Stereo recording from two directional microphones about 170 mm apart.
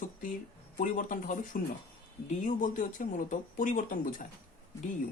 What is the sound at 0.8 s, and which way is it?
Speech, 50° left (ahead or behind).